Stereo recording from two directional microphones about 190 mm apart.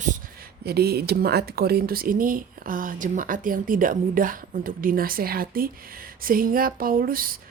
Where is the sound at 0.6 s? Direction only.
55° right (ahead or behind).